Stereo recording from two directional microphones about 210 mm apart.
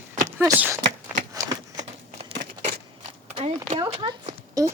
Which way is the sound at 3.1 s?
30° right (ahead or behind).